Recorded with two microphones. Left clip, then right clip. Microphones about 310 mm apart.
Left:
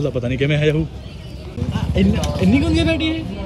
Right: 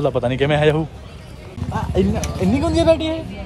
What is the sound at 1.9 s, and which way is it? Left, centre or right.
Speech, right.